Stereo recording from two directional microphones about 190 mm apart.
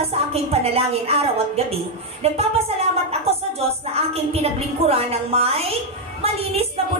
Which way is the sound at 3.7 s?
30° right (ahead or behind).